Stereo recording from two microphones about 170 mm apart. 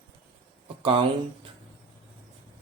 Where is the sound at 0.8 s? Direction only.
35° right (ahead or behind).